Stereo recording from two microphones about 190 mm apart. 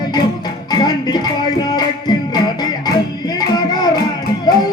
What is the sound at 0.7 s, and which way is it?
Music, 20° left (ahead or behind).